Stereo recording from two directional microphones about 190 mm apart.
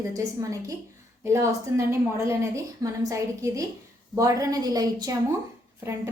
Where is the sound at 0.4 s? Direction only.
20° right (ahead or behind).